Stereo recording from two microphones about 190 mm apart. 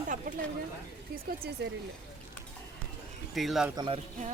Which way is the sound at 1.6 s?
60° right (ahead or behind).